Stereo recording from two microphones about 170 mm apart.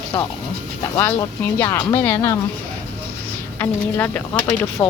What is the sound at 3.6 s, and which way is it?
Speech, 10° left (ahead or behind).